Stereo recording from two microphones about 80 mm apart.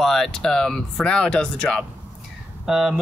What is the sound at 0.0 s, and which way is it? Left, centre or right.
Speech, centre.